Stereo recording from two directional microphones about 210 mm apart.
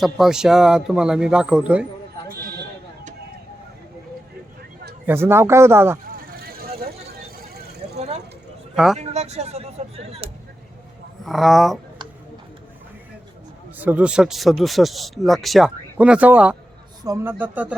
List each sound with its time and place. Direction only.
0.0 s speech: centre (ahead or behind)
5.0 s a man's voice: 10° right (ahead or behind)
6.1 s vehicle: 45° right (ahead or behind)
8.7 s speech: centre (ahead or behind)
9.0 s a sound: 30° right (ahead or behind)
11.3 s speech: centre (ahead or behind)
13.7 s a man's voice: 10° right (ahead or behind)